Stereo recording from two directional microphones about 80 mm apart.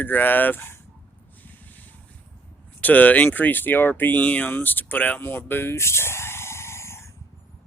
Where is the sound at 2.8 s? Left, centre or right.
Centre; by 7.0 s left.